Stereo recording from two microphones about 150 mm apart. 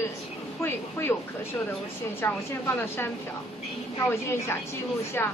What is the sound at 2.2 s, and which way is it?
A woman's voice, 15° left (ahead or behind).